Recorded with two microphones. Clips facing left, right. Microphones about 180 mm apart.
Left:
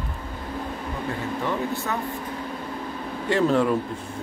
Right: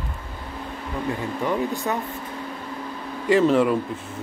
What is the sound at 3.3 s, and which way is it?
Speech, 5° right (ahead or behind).